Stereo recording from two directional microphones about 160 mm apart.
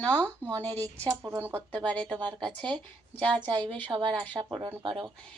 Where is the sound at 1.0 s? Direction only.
20° right (ahead or behind).